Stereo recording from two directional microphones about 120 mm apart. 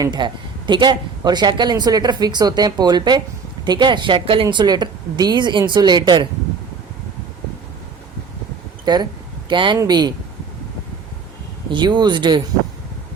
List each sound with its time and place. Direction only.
0.0 s speech: 40° right (ahead or behind)
8.8 s speech: 35° right (ahead or behind)
11.7 s speech: 40° right (ahead or behind)